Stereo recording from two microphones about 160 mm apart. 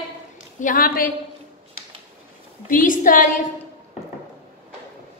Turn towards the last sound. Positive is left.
turn(degrees=55)  # may be behind; listen again after turning